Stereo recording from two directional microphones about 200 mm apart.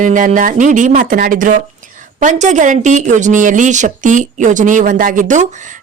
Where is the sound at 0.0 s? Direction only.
40° right (ahead or behind).